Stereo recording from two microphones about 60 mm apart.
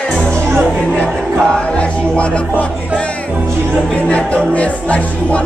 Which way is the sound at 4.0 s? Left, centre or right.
Left.